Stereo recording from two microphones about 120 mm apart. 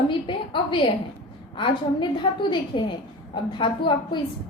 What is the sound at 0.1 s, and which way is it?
A woman's voice, 45° left (ahead or behind).